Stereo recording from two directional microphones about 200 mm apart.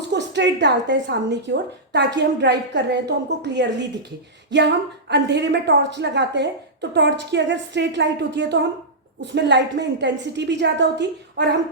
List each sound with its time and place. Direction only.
0.1 s a woman's voice: 60° right (ahead or behind)